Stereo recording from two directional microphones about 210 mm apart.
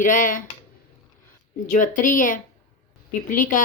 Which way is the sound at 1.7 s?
40° left (ahead or behind).